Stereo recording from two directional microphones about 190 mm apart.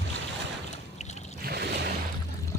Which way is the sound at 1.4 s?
60° right (ahead or behind).